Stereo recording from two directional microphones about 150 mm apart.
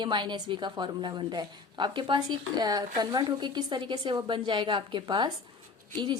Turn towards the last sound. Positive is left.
turn(degrees=-30)  # may be behind; listen again after turning